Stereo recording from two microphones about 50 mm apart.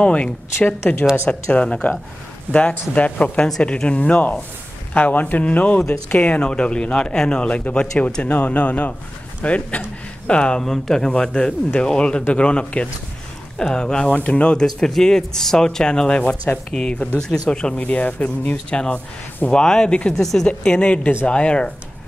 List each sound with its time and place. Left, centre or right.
0.0 s speech: left
10.6 s speech: centre
11.1 s speech: centre
17.7 s speech: left
18.7 s speech: left
20.2 s speech: centre
20.4 s speech: left